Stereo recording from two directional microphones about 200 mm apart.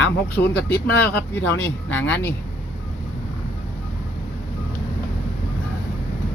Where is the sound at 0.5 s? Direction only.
50° left (ahead or behind).